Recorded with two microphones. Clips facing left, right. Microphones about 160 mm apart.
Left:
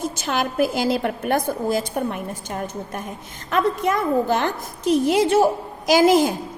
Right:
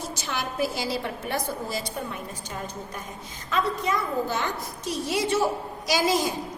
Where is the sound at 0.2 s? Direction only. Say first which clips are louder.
Left 7 dB; 55° left (ahead or behind).